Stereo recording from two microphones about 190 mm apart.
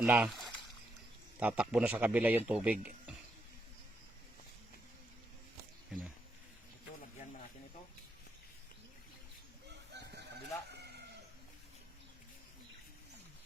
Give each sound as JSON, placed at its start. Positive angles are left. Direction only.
{"t": 0.0, "sound": "speech", "side_deg": -5}
{"t": 1.4, "sound": "a man's voice", "side_deg": -5}
{"t": 9.6, "sound": "chicken", "side_deg": -60}